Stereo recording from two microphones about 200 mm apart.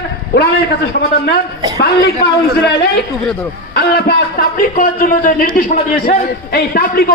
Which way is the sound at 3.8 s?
55° left (ahead or behind).